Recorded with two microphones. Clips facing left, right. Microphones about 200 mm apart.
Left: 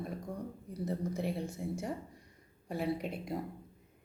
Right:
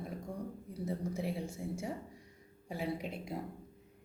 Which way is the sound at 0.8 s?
5° right (ahead or behind).